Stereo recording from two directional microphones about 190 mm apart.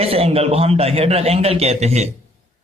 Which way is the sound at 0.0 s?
30° right (ahead or behind).